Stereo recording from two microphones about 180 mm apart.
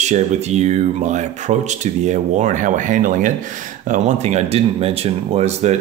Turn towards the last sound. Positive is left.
turn(degrees=-35)  # may be behind; listen again after turning